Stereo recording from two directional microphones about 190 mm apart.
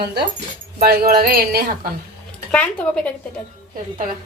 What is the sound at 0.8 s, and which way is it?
Speech, 55° right (ahead or behind).